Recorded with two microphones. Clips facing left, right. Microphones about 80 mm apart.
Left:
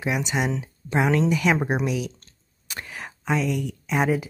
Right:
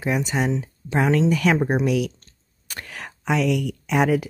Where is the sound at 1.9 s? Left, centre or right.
Right.